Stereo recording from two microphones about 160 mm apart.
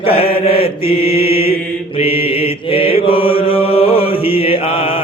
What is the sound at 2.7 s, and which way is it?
Mantra, 35° left (ahead or behind).